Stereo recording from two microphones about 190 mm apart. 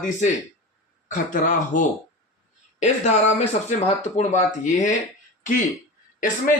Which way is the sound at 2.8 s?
35° left (ahead or behind).